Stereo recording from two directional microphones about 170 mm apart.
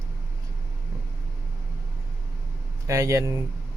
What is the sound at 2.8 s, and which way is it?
Speech, 15° right (ahead or behind).